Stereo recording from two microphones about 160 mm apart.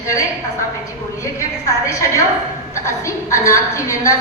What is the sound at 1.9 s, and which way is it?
A woman's voice, 20° left (ahead or behind).